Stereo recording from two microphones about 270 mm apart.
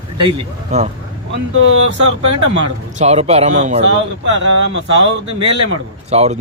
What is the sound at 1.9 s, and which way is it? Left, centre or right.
Speech, right.